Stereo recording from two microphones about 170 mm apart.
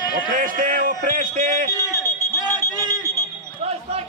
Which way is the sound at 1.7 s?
20° left (ahead or behind).